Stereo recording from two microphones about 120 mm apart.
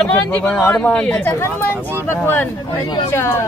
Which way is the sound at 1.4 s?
20° left (ahead or behind).